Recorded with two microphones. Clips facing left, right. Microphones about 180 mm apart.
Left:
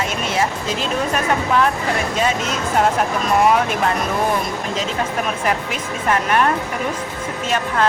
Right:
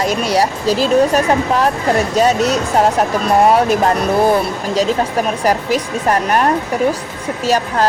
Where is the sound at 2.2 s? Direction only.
40° right (ahead or behind).